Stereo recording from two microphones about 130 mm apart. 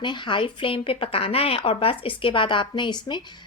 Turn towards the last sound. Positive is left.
turn(degrees=35)  # may be behind; listen again after turning